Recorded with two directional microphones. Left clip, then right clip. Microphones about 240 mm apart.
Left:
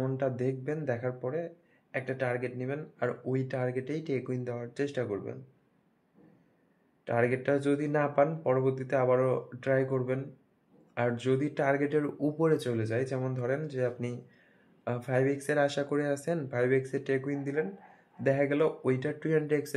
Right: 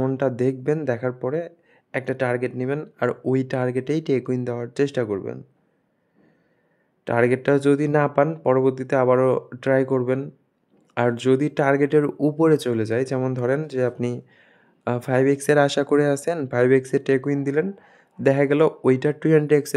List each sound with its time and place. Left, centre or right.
0.0 s speech: right
7.1 s speech: right